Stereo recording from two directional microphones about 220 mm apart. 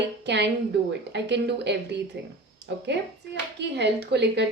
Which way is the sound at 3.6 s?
50° right (ahead or behind).